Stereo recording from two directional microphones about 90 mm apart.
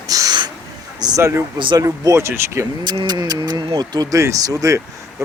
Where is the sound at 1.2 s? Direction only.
25° right (ahead or behind).